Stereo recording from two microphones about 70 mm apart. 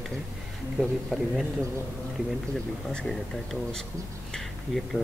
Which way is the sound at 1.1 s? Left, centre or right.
Centre.